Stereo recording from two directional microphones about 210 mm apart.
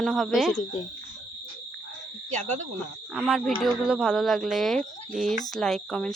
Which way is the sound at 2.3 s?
35° right (ahead or behind).